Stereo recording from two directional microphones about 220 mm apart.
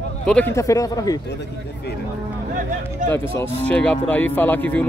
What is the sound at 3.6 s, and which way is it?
Speech, 5° left (ahead or behind).